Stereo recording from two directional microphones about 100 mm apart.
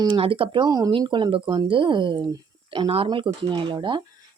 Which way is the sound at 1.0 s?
55° right (ahead or behind).